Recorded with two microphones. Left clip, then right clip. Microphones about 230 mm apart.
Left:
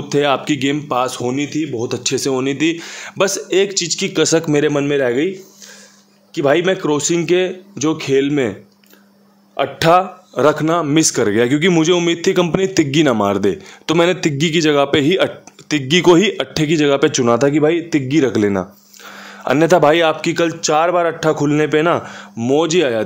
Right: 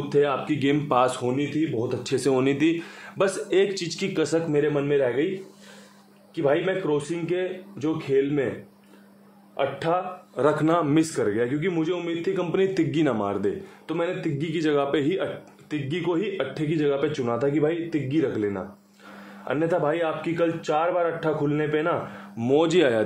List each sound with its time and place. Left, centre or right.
0.1 s a man's voice: left
0.6 s speech: left
1.2 s a man's voice: left
2.0 s speech: left
2.8 s speech: left
4.5 s a man's voice: left
6.3 s a man's voice: left
9.6 s a man's voice: left
10.3 s a man's voice: left
11.1 s a man's voice: left
12.5 s a man's voice: left
22.4 s speech: left